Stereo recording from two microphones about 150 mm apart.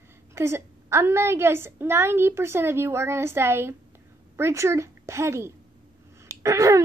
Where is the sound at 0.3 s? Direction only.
20° right (ahead or behind).